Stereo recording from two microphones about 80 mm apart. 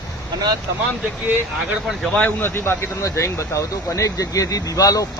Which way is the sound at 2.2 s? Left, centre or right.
Left.